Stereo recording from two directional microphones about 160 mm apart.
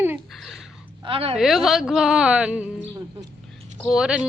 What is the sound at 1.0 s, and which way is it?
Speech, 35° right (ahead or behind).